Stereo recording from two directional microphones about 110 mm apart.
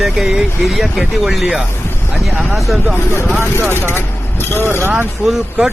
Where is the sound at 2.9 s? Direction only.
20° left (ahead or behind).